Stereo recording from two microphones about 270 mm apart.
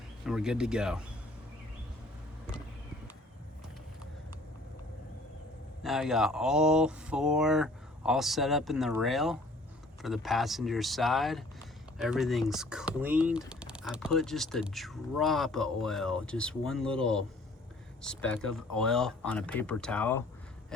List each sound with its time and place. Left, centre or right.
0.3 s speech: centre
5.8 s speech: centre